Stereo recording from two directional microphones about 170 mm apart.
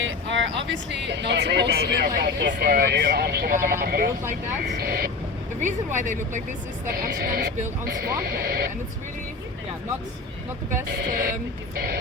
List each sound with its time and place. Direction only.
0.0 s speech: 90° right; by 5.1 s 65° right (ahead or behind)
5.5 s speech: 45° right (ahead or behind)
7.2 s speech: 60° right (ahead or behind)
10.9 s speech: 65° right (ahead or behind)